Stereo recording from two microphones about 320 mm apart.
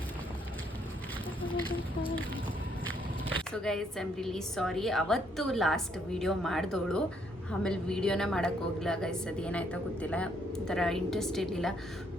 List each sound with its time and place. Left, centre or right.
1.4 s speech: centre
3.5 s a woman's voice: centre